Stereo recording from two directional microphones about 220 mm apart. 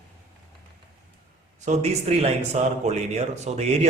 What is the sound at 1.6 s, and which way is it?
A man's voice, 30° right (ahead or behind).